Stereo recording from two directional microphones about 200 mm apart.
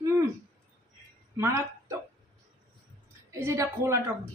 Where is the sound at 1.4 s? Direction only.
15° right (ahead or behind).